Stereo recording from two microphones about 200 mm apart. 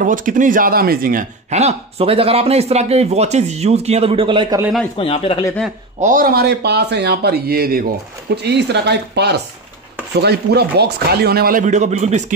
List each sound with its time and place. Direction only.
0.0 s speech: 40° right (ahead or behind); by 4.6 s 25° right (ahead or behind)
4.9 s speech: 30° left (ahead or behind)
5.9 s speech: 40° right (ahead or behind)